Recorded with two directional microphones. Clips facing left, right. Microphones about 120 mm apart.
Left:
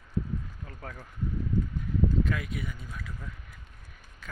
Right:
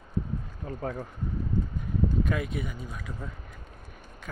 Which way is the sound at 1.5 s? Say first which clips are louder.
Left 1 dB; 45° left (ahead or behind).